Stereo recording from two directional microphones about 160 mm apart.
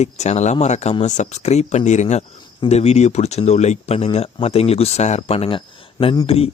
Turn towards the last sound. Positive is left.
turn(degrees=40)  # may be behind; listen again after turning